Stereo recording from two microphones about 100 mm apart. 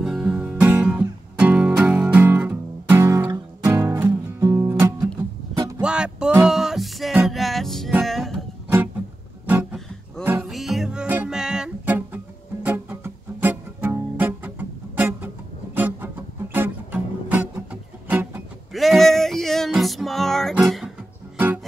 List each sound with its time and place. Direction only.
0.0 s music: 5° right (ahead or behind); by 4.6 s 30° right (ahead or behind)
5.8 s music: 10° right (ahead or behind)
9.5 s music: 20° right (ahead or behind)
10.5 s music: centre (ahead or behind)
12.6 s music: 15° right (ahead or behind)
18.7 s music: centre (ahead or behind)